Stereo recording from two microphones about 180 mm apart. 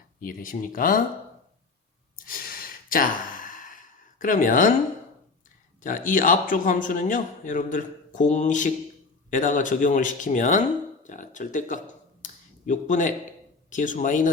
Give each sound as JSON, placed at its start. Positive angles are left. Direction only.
{"t": 0.2, "sound": "a man's voice", "side_deg": 50}
{"t": 2.1, "sound": "sigh", "side_deg": 50}
{"t": 5.8, "sound": "a man's voice", "side_deg": 50}
{"t": 12.2, "sound": "a sound", "side_deg": 45}
{"t": 13.7, "sound": "a man's voice", "side_deg": 45}